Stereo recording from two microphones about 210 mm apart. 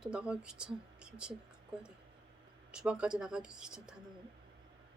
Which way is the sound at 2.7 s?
5° right (ahead or behind).